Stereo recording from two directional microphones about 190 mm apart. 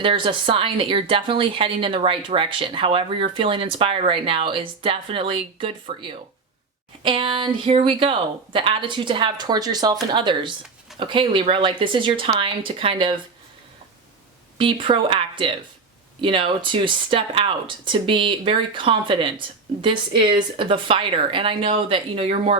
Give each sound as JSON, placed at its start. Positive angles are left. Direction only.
{"t": 0.0, "sound": "speech", "side_deg": -25}
{"t": 14.6, "sound": "speech", "side_deg": -25}